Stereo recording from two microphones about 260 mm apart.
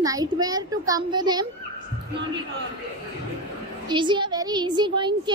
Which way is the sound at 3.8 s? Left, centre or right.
Centre.